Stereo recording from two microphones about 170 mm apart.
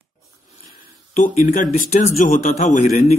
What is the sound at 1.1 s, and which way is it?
Speech, 50° left (ahead or behind).